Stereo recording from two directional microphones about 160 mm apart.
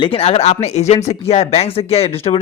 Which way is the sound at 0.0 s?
35° left (ahead or behind).